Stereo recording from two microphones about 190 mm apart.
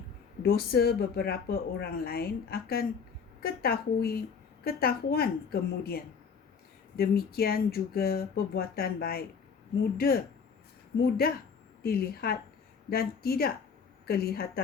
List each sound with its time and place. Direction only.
0.4 s a woman's voice: 55° left (ahead or behind)
11.8 s a woman's voice: 55° left (ahead or behind)